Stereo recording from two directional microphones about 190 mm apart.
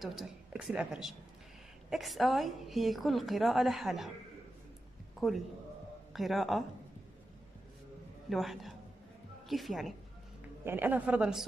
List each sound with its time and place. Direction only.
0.0 s a woman's voice: centre (ahead or behind)
5.2 s a woman's voice: centre (ahead or behind)
8.3 s a woman's voice: centre (ahead or behind)
10.6 s a woman's voice: 10° right (ahead or behind)